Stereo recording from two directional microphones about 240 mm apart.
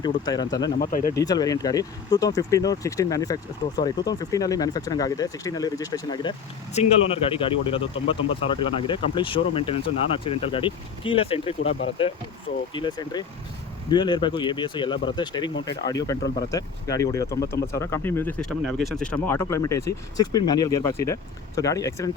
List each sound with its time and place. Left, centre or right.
0.0 s speech: centre
0.8 s speech: left
1.1 s speech: centre